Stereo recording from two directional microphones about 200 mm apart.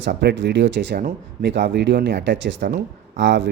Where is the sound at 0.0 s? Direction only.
55° right (ahead or behind).